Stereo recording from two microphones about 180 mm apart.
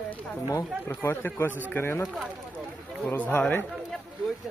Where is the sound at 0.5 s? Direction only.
15° left (ahead or behind).